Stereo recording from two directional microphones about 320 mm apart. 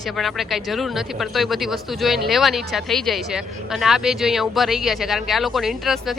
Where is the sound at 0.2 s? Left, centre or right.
Centre.